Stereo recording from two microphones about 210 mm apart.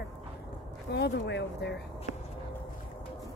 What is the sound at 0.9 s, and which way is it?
Speech, 55° left (ahead or behind).